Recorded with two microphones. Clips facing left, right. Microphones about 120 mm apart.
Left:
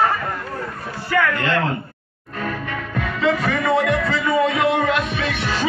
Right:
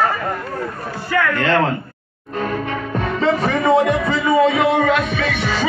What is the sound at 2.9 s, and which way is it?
Speech, 30° right (ahead or behind).